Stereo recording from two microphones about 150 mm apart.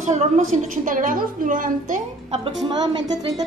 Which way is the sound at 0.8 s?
60° right (ahead or behind).